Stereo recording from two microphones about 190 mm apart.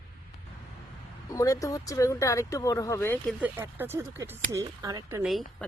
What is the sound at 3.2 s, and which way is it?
Speech, 10° right (ahead or behind).